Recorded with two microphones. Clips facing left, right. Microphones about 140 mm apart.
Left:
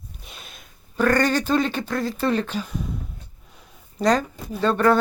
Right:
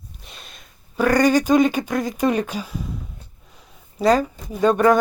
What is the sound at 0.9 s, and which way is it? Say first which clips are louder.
Speech: right 3 dB; 10° right (ahead or behind).